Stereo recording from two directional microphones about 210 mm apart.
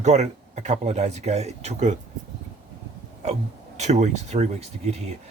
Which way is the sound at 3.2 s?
30° right (ahead or behind).